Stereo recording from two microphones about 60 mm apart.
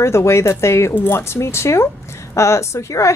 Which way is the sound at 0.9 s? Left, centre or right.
Left.